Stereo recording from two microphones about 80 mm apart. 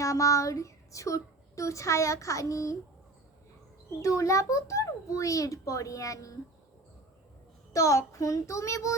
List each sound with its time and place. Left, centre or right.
0.0 s speech: left
4.0 s a child's voice: left
7.7 s speech: left